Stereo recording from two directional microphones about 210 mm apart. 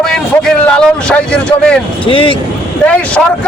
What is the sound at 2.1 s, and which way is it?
Speech, 25° left (ahead or behind).